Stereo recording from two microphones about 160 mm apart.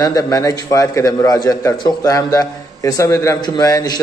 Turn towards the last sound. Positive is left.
turn(degrees=20)  # may be behind; listen again after turning